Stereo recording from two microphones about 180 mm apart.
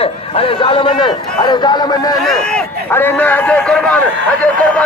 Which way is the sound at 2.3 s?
10° left (ahead or behind).